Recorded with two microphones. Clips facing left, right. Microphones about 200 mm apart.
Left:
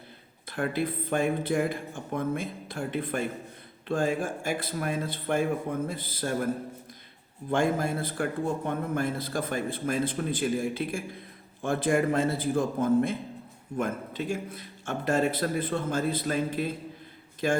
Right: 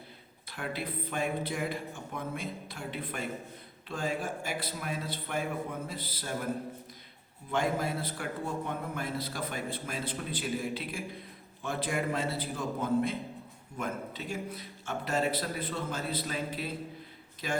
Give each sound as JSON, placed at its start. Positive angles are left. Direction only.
{"t": 0.5, "sound": "a man's voice", "side_deg": 50}
{"t": 7.5, "sound": "a man's voice", "side_deg": 50}